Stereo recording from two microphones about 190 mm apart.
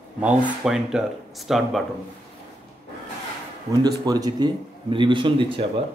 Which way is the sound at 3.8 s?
20° right (ahead or behind).